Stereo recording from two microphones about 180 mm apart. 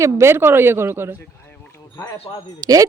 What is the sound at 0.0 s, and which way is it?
Speech, 15° right (ahead or behind).